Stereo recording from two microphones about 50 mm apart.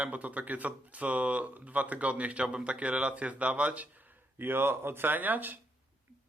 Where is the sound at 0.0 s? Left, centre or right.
Right.